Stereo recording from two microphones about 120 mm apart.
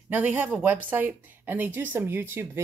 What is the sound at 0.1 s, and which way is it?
A woman's voice, 15° right (ahead or behind).